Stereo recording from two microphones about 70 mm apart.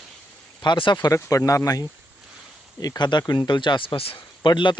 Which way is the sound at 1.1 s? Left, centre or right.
Left.